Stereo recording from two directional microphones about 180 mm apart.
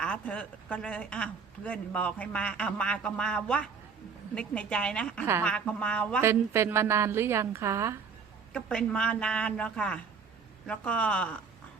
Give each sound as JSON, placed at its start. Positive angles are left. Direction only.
{"t": 0.0, "sound": "a woman's voice", "side_deg": 5}
{"t": 6.2, "sound": "a woman's voice", "side_deg": -15}
{"t": 8.5, "sound": "a woman's voice", "side_deg": 5}